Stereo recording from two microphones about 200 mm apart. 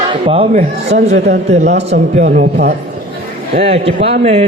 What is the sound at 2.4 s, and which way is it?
Speech, 50° right (ahead or behind).